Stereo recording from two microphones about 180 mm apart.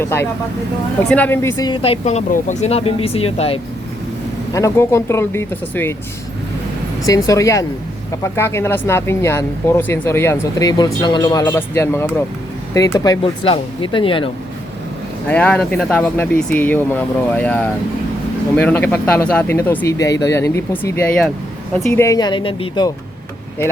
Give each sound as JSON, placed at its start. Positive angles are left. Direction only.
{"t": 0.0, "sound": "speech", "side_deg": 15}
{"t": 4.5, "sound": "speech", "side_deg": 15}
{"t": 7.0, "sound": "speech", "side_deg": 20}
{"t": 13.2, "sound": "speech", "side_deg": 30}
{"t": 15.3, "sound": "a woman's voice", "side_deg": 5}
{"t": 22.0, "sound": "speech", "side_deg": 20}